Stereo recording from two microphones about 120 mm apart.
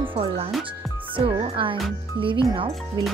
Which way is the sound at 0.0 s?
50° right (ahead or behind).